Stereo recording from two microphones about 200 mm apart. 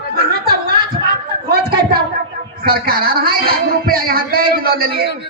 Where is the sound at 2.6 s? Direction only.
50° right (ahead or behind).